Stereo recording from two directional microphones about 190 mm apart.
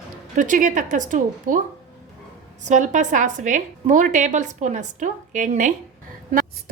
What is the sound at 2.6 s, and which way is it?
A woman's voice, 40° right (ahead or behind).